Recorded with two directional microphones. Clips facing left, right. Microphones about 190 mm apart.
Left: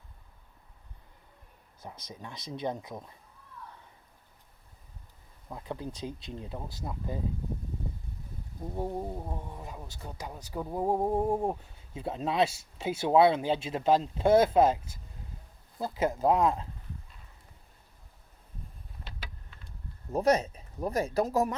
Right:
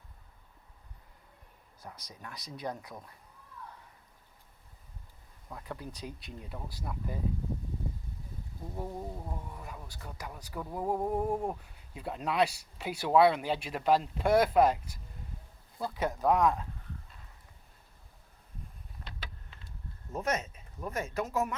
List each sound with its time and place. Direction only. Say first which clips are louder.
1.8 s speech: left 4 dB; 20° left (ahead or behind)
5.5 s speech: left 4 dB; 20° left (ahead or behind)
8.7 s speech: left 5 dB; 25° left (ahead or behind)
20.1 s speech: left 8 dB; 35° left (ahead or behind)